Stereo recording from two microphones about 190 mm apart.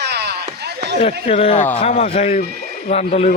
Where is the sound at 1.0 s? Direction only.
35° left (ahead or behind).